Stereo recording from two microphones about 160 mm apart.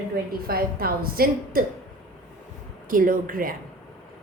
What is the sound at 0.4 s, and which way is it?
A woman's voice, 70° right (ahead or behind).